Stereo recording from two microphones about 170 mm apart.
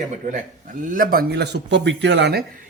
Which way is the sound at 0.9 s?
55° right (ahead or behind).